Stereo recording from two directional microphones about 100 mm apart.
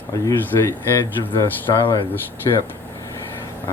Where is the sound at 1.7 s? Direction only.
45° left (ahead or behind).